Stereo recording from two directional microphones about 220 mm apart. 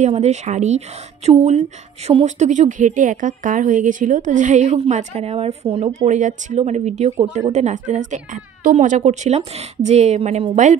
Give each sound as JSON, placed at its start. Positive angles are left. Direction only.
{"t": 0.0, "sound": "a woman's voice", "side_deg": -30}